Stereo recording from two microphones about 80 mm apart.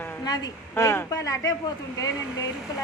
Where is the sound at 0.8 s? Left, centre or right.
Left.